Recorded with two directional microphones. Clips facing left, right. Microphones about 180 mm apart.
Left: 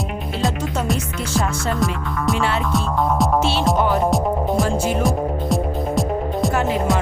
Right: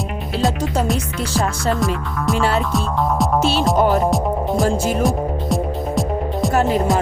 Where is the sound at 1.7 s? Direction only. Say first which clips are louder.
Right 1 dB; centre (ahead or behind).